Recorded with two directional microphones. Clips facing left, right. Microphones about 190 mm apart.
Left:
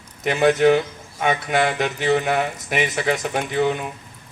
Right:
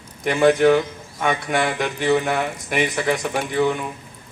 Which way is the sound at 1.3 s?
20° left (ahead or behind).